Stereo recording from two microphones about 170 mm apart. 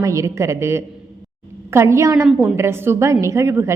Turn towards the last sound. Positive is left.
turn(degrees=-15)  # may be behind; listen again after turning